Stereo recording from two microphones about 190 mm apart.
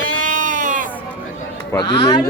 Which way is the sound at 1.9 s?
25° left (ahead or behind).